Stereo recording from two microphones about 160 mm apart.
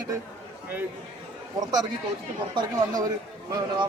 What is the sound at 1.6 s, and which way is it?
Speech, 25° right (ahead or behind).